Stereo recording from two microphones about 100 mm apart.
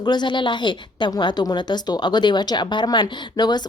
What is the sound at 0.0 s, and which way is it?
A woman's voice, 45° left (ahead or behind).